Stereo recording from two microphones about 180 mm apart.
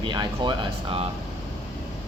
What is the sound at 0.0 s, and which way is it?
Speech, 25° right (ahead or behind).